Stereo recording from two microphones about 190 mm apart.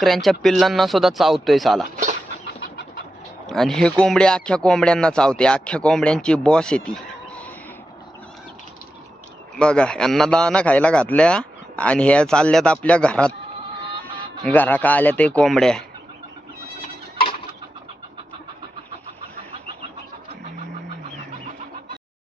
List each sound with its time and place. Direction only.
0.0 s speech: centre (ahead or behind)
2.5 s bird: 70° left (ahead or behind)
3.5 s speech: centre (ahead or behind)
9.6 s speech: 5° left (ahead or behind)
14.4 s speech: 10° left (ahead or behind)